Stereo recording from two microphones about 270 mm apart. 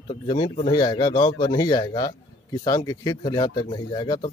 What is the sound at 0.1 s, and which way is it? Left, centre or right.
Speech, centre.